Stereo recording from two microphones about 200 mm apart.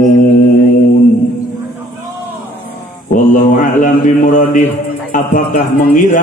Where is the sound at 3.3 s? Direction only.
40° left (ahead or behind).